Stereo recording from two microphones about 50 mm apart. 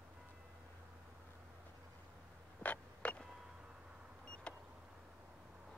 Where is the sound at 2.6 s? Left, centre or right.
Left.